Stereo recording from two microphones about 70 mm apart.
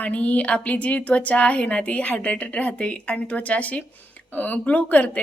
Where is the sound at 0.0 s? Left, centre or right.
Centre.